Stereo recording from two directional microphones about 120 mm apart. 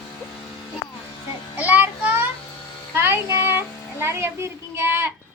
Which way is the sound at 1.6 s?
15° right (ahead or behind).